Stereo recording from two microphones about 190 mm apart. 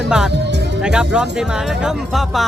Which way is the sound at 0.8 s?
5° right (ahead or behind).